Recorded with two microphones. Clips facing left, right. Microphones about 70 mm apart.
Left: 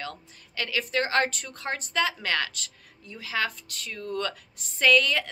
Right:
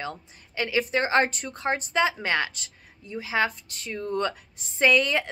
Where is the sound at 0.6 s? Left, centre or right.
Right.